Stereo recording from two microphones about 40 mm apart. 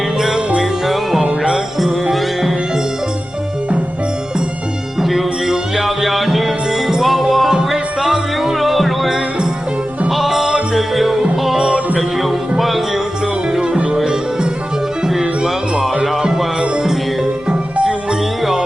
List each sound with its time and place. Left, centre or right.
0.2 s music: centre
1.2 s music: centre
1.8 s music: centre
4.9 s music: centre
13.5 s music: right